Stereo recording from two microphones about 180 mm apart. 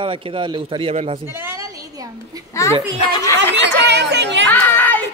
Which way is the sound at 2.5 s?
15° left (ahead or behind).